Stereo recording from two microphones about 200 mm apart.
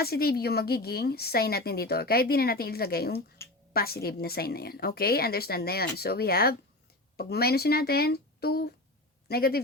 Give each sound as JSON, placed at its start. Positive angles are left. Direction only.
{"t": 0.0, "sound": "a woman's voice", "side_deg": 50}